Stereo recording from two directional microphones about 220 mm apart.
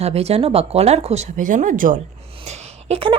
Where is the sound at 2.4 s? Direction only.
30° right (ahead or behind).